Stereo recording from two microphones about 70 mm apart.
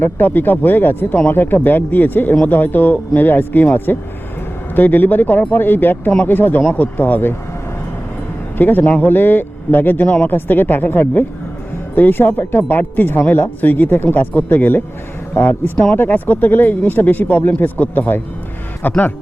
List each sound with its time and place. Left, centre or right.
0.0 s speech: left
8.5 s speech: left